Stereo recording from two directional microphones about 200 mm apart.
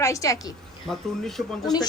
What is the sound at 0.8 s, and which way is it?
Speech, centre (ahead or behind).